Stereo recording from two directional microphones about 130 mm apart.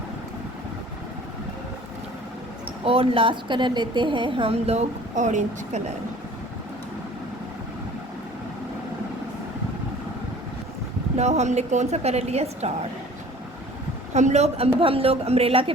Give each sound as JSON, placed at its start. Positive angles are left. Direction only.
{"t": 2.8, "sound": "a woman's voice", "side_deg": -45}
{"t": 11.2, "sound": "a woman's voice", "side_deg": -60}
{"t": 14.1, "sound": "a woman's voice", "side_deg": -60}